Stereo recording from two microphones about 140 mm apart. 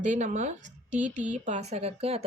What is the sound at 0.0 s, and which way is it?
Speech, 60° right (ahead or behind).